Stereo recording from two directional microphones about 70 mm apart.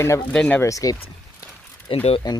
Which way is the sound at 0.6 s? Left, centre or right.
Left.